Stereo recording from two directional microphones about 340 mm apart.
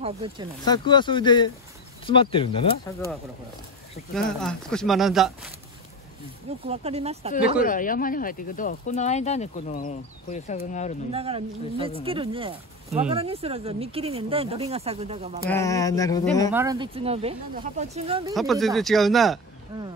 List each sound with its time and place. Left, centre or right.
0.0 s speech: centre
0.7 s speech: centre
6.7 s speech: centre
7.6 s speech: left
11.1 s speech: centre
15.5 s speech: centre
16.5 s speech: centre
18.3 s speech: centre
19.7 s speech: centre